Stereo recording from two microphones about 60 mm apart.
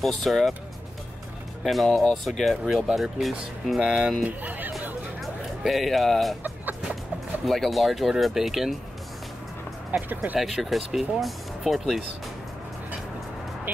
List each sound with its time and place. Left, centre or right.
0.2 s speech: centre
1.6 s speech: centre
4.3 s music: right
5.2 s speech: centre
6.4 s chicken: right
7.4 s speech: centre
9.8 s speech: right
10.4 s speech: centre